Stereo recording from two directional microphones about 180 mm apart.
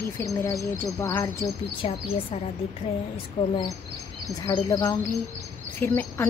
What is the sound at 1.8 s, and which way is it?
A woman's voice, 35° left (ahead or behind).